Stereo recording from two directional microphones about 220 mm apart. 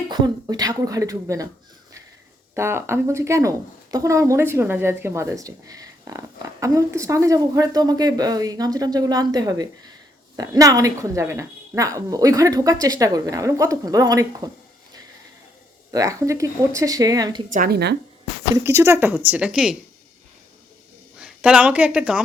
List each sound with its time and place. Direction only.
0.1 s speech: 20° right (ahead or behind)
2.6 s speech: 10° right (ahead or behind)
15.9 s speech: 15° right (ahead or behind)
17.5 s speech: 40° right (ahead or behind)
18.5 s speech: 15° right (ahead or behind)
21.2 s speech: 5° right (ahead or behind)